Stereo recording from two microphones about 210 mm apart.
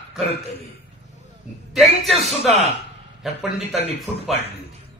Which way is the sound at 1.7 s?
Centre (ahead or behind).